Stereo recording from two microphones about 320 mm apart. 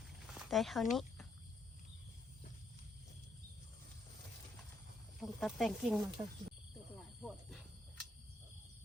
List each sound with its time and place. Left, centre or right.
0.3 s speech: centre
5.2 s speech: centre